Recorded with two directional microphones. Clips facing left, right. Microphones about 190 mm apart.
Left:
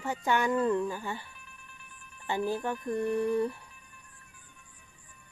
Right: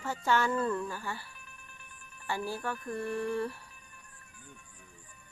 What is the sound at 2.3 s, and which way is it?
Speech, 20° left (ahead or behind).